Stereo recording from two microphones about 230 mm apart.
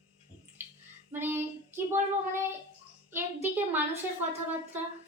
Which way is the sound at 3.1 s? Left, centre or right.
Centre.